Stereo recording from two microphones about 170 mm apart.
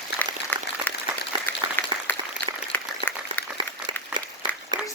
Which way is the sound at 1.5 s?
10° left (ahead or behind).